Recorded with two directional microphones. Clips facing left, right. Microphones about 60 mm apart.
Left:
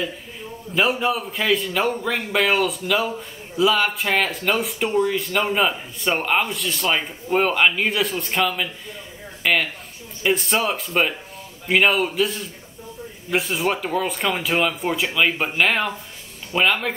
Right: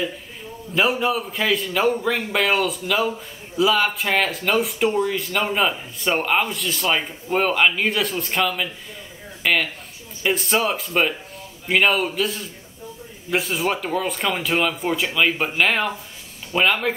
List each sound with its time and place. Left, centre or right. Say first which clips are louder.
0.7 s a man's voice: even; centre